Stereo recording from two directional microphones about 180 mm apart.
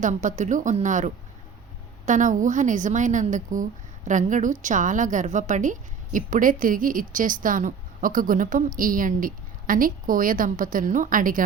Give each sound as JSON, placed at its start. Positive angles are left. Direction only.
{"t": 0.0, "sound": "a woman's voice", "side_deg": -45}